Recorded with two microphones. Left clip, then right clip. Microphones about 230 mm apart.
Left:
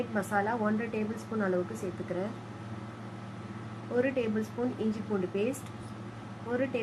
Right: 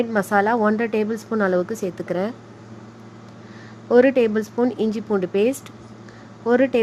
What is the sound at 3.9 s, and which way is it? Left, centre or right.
Speech, right.